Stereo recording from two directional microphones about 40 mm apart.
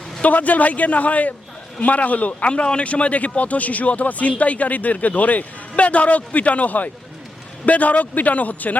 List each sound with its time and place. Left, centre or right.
0.2 s speech: left
2.5 s speech: left